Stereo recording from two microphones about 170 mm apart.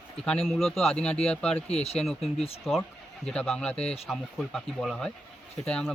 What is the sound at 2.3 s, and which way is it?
Speech, 35° left (ahead or behind).